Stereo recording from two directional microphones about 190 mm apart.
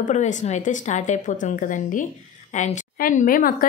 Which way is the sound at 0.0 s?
40° left (ahead or behind).